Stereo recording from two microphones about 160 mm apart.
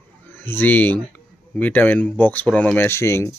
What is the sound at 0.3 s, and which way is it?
Speech, 10° left (ahead or behind).